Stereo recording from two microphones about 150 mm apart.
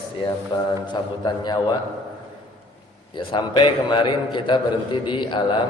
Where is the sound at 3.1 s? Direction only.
30° left (ahead or behind).